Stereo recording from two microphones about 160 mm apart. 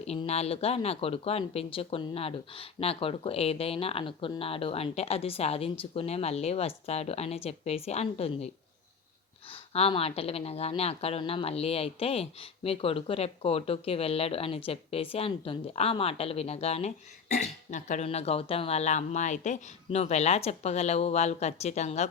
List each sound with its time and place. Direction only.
0.0 s speech: 40° left (ahead or behind)
9.5 s speech: 35° left (ahead or behind)
17.4 s speech: 50° left (ahead or behind)